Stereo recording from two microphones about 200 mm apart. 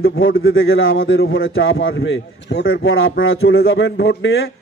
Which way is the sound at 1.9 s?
55° left (ahead or behind).